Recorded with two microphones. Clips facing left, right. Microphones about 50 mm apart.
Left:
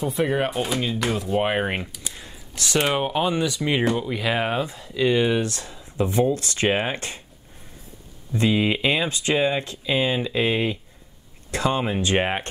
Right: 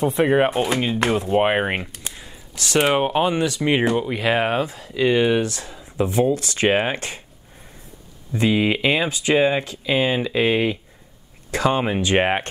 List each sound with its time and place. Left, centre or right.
0.2 s speech: right
0.5 s speech: right
8.3 s speech: right